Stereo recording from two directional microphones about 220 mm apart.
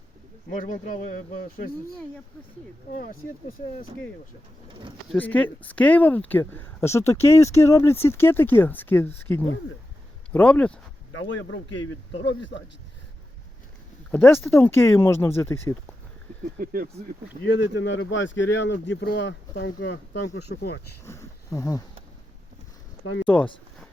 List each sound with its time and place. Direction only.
0.5 s speech: 35° left (ahead or behind)
2.9 s speech: 40° left (ahead or behind)
5.0 s speech: 5° left (ahead or behind)
11.1 s speech: 60° left (ahead or behind)
14.1 s speech: 10° left (ahead or behind)
16.6 s speech: 40° right (ahead or behind)
17.4 s speech: 55° left (ahead or behind)
21.0 s speech: 10° left (ahead or behind)
23.2 s speech: 5° left (ahead or behind)